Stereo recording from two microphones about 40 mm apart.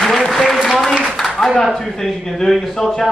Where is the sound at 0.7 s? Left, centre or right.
Centre.